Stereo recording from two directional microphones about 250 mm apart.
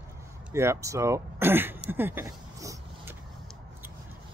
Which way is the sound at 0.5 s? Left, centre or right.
Centre.